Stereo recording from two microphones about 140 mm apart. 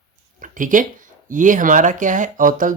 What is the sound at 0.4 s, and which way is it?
Speech, 70° right (ahead or behind).